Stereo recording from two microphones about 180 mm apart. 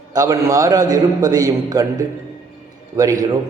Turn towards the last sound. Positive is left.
turn(degrees=-20)  # may be behind; listen again after turning